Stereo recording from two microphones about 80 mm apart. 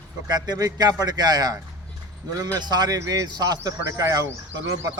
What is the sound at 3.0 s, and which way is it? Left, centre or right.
Speech, right.